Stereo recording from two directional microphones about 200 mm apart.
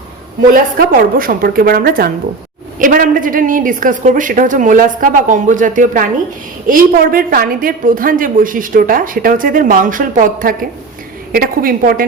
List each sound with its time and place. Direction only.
0.5 s a woman's voice: 45° right (ahead or behind)